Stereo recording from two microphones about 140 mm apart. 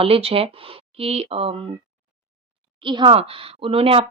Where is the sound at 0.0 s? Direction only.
40° right (ahead or behind).